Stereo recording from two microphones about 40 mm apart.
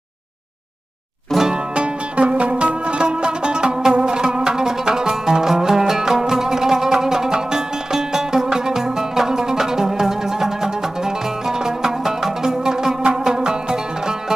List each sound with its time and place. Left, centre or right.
1.3 s music: centre
1.7 s music: right